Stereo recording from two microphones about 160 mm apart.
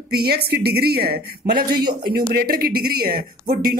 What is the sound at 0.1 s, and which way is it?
A woman's voice, 75° right (ahead or behind).